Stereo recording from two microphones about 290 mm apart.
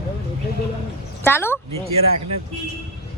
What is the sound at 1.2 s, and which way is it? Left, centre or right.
Speech, centre.